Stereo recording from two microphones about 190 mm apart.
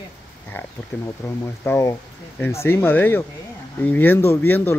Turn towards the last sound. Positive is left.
turn(degrees=10)  # may be behind; listen again after turning